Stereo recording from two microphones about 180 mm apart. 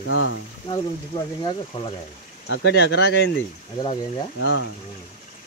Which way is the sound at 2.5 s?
85° left.